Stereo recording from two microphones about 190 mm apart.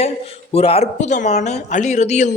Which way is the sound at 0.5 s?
30° left (ahead or behind).